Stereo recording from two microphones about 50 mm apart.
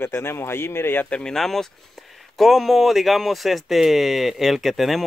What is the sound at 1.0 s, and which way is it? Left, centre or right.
Speech, left.